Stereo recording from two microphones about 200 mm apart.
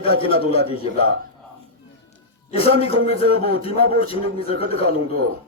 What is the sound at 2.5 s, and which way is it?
A man's voice, 30° left (ahead or behind).